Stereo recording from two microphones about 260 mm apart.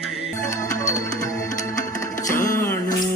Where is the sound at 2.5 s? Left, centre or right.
Centre.